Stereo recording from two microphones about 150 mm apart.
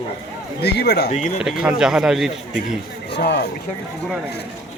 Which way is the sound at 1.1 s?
55° left (ahead or behind).